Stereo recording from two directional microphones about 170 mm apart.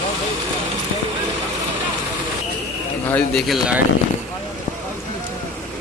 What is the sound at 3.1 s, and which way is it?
Speech, centre (ahead or behind).